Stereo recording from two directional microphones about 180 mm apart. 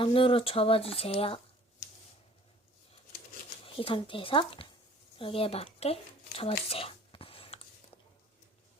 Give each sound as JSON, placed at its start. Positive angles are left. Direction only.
{"t": 0.0, "sound": "speech", "side_deg": 30}
{"t": 3.6, "sound": "speech", "side_deg": 30}
{"t": 6.7, "sound": "whispering", "side_deg": 30}